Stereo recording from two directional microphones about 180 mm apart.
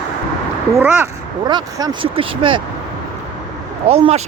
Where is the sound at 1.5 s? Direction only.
25° right (ahead or behind).